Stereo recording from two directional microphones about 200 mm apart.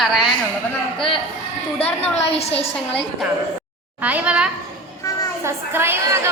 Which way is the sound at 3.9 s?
10° right (ahead or behind).